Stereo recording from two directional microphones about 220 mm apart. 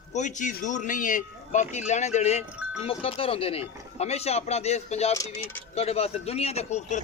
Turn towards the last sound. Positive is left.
turn(degrees=30)  # may be behind; listen again after turning